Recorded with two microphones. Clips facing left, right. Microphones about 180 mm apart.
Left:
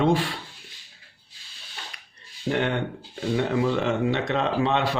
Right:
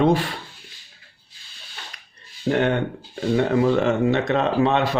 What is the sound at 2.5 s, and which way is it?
Speech, 50° right (ahead or behind).